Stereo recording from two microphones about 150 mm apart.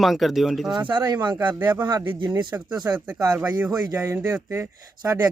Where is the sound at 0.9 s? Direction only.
30° right (ahead or behind).